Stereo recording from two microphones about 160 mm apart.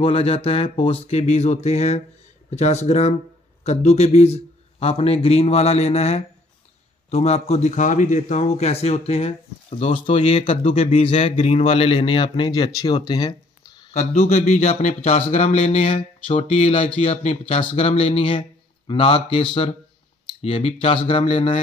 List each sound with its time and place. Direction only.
0.0 s speech: 35° left (ahead or behind)
13.9 s speech: 40° left (ahead or behind)